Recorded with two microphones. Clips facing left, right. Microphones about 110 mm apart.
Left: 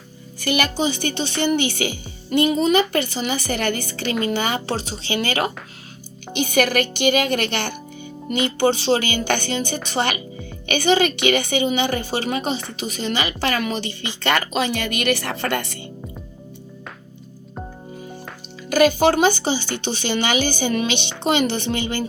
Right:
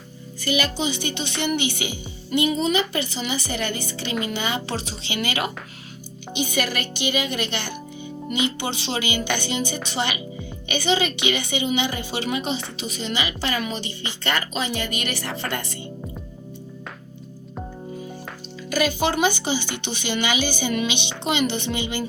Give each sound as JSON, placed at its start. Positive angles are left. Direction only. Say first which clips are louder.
{"t": 0.4, "sound": "speech", "louder": "left 2 dB", "side_deg": 65}
{"t": 0.8, "sound": "a woman's voice", "louder": "left 4 dB", "side_deg": 45}
{"t": 6.3, "sound": "speech", "louder": "left 6 dB", "side_deg": 55}
{"t": 8.4, "sound": "a woman's voice", "louder": "left 9 dB", "side_deg": 45}
{"t": 18.7, "sound": "a woman's voice", "louder": "left 7 dB", "side_deg": 55}
{"t": 19.5, "sound": "speech", "louder": "left 2 dB", "side_deg": -15}
{"t": 20.1, "sound": "a woman's voice", "louder": "left 2 dB", "side_deg": 45}